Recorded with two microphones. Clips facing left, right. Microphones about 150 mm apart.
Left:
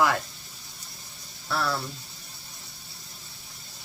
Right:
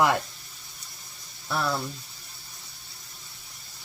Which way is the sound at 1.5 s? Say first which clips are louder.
Even; 15° right (ahead or behind).